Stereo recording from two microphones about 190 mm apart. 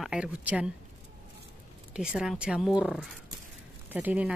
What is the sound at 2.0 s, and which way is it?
Speech, 5° right (ahead or behind).